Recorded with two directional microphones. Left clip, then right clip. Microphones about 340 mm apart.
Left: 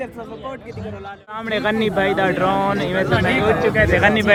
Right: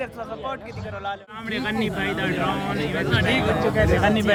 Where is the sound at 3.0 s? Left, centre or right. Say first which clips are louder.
Left 3 dB; right.